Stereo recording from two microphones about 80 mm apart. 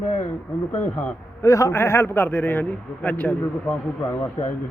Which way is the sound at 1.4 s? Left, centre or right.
Left.